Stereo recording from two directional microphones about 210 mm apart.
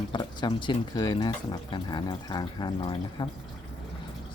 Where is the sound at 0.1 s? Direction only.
20° left (ahead or behind).